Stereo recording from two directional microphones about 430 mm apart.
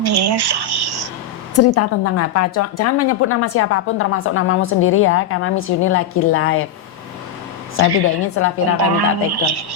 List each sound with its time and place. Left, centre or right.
0.0 s speech: right
1.5 s a woman's voice: left
8.0 s a woman's voice: left
9.0 s speech: right